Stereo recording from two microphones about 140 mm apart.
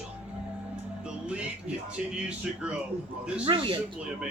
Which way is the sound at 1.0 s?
10° right (ahead or behind).